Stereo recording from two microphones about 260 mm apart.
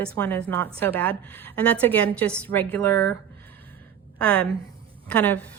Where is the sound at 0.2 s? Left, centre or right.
Centre.